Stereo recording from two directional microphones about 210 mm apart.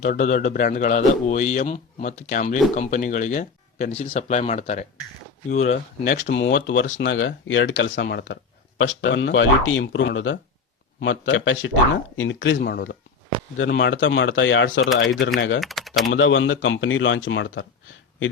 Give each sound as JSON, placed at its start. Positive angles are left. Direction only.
{"t": 0.0, "sound": "a man's voice", "side_deg": 35}
{"t": 6.5, "sound": "speech", "side_deg": 60}
{"t": 15.6, "sound": "speech", "side_deg": 0}
{"t": 16.0, "sound": "speech", "side_deg": 65}